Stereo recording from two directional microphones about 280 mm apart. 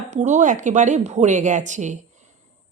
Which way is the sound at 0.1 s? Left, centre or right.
Right.